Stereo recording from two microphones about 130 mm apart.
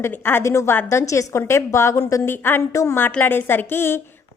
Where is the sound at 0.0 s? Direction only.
15° left (ahead or behind).